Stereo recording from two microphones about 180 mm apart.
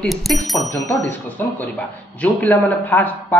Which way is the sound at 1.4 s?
10° left (ahead or behind).